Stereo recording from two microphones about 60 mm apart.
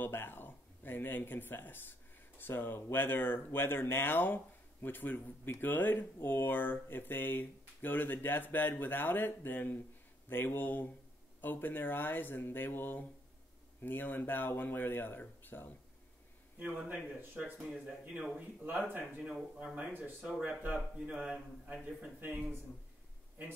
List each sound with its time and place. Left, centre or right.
0.0 s speech: left
16.5 s speech: right
17.2 s speech: right
18.1 s speech: centre
18.7 s speech: right
19.2 s speech: centre
19.7 s speech: right
20.7 s speech: centre
21.8 s speech: right